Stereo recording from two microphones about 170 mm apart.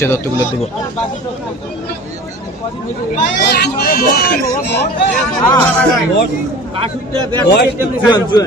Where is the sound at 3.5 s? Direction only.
70° left (ahead or behind).